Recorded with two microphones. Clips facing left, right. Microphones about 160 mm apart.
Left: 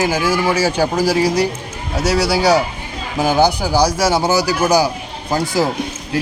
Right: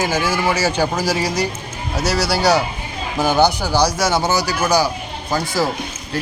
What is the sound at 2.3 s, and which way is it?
Speech, 5° left (ahead or behind).